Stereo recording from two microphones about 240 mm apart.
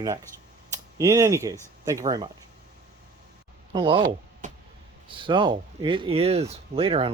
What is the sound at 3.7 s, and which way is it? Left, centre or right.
Speech, right.